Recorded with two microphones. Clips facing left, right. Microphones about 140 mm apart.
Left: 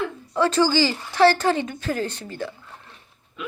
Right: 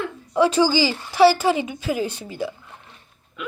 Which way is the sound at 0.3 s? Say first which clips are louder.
Right 2 dB; 10° right (ahead or behind).